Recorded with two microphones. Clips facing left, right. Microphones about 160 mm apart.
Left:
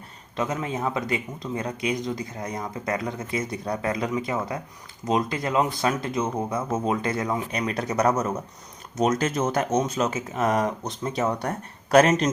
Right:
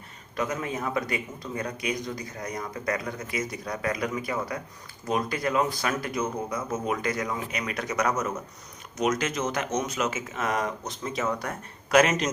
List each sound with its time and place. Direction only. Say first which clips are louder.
0.3 s speech: left 2 dB; 25° left (ahead or behind)